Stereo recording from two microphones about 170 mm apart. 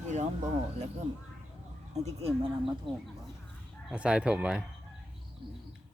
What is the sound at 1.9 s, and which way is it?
Speech, 40° right (ahead or behind).